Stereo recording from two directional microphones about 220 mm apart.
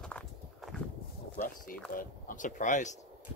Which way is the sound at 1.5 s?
40° left (ahead or behind).